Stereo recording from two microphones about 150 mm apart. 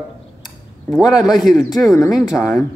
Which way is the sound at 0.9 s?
Centre (ahead or behind).